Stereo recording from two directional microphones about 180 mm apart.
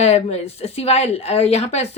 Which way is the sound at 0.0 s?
35° left (ahead or behind).